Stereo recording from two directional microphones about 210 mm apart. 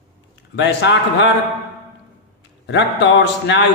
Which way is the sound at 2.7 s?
55° left (ahead or behind).